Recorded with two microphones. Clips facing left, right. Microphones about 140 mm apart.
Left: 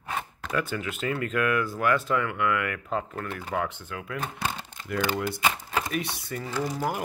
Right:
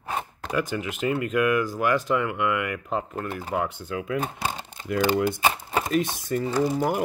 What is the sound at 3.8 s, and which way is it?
Speech, 35° right (ahead or behind).